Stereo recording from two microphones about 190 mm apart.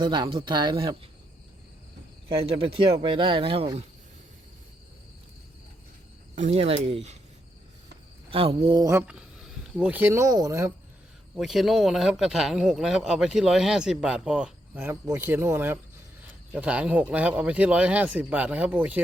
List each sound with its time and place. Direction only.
0.0 s speech: 25° right (ahead or behind)
2.5 s speech: 30° right (ahead or behind)
6.3 s speech: 35° right (ahead or behind)
8.3 s speech: 30° right (ahead or behind)
8.9 s speech: 10° right (ahead or behind)
11.3 s speech: centre (ahead or behind)